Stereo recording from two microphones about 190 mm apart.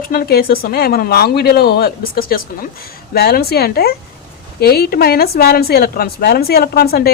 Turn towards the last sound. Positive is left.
turn(degrees=55)  # may be behind; listen again after turning